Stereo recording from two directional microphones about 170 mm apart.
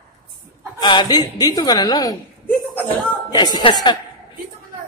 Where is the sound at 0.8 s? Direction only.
25° left (ahead or behind).